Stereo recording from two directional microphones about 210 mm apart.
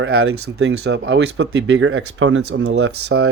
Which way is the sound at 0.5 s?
55° right (ahead or behind).